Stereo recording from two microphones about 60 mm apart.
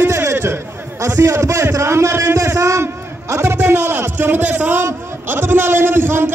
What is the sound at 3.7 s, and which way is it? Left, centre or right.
A man's voice, right.